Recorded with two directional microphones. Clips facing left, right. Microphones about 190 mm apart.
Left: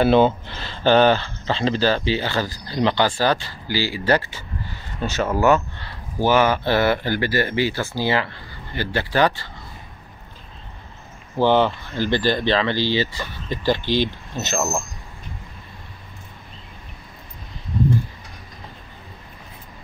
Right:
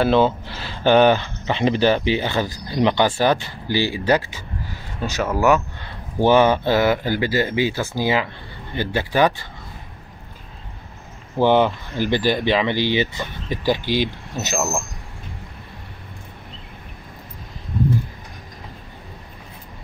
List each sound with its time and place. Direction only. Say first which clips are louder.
0.0 s speech: left 1 dB; 5° left (ahead or behind)
0.5 s speech: right 1 dB; 10° right (ahead or behind)
5.2 s speech: even; 5° right (ahead or behind)
6.1 s speech: right 3 dB; 20° right (ahead or behind)
11.3 s speech: right 1 dB; 15° right (ahead or behind)